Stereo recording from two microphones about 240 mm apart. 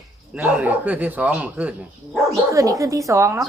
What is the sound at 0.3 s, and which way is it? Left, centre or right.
A woman's voice, centre.